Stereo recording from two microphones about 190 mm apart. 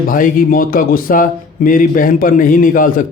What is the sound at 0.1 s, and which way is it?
Speech, 50° left (ahead or behind).